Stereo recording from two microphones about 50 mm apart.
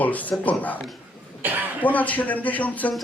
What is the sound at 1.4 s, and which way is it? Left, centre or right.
Speech, right.